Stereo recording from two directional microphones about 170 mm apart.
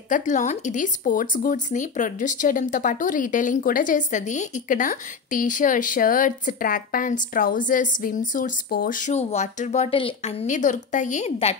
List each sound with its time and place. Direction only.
0.1 s speech: 50° left (ahead or behind); by 10.3 s 35° left (ahead or behind)
10.4 s speech: 45° left (ahead or behind)